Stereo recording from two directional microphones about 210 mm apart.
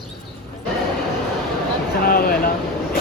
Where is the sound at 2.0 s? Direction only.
45° left (ahead or behind).